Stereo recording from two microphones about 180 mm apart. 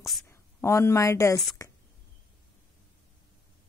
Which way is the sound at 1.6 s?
20° left (ahead or behind).